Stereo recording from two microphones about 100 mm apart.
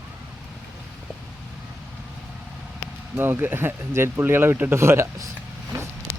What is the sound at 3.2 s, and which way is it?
Speech, 20° right (ahead or behind).